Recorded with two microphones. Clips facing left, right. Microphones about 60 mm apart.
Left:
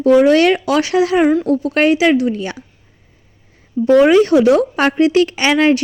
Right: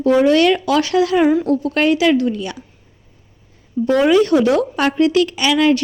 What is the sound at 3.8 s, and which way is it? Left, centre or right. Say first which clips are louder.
A woman's voice: left 4 dB; left.